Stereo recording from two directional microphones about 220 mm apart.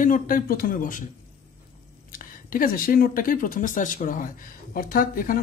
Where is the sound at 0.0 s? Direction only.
40° left (ahead or behind).